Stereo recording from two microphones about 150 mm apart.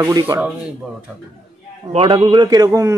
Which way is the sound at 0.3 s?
25° right (ahead or behind).